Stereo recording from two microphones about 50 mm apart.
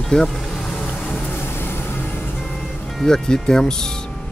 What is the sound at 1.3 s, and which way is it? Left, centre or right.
Vehicle, left.